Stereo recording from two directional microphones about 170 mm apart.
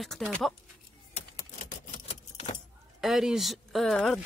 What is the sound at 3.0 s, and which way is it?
Speech, centre (ahead or behind).